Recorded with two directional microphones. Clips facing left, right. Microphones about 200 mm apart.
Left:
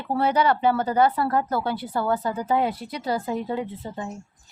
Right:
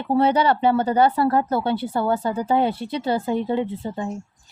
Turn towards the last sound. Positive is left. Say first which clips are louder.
# right 5 dB
turn(degrees=-30)  # may be behind; listen again after turning